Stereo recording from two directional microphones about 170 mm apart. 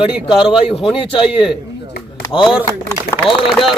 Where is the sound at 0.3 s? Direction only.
30° left (ahead or behind).